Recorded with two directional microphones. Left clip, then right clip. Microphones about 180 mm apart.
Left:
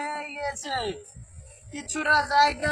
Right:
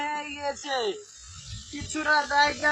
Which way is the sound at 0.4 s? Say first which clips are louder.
Right 1 dB; 25° left (ahead or behind).